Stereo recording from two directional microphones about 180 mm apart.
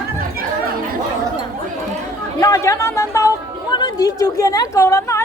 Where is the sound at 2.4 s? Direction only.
15° left (ahead or behind).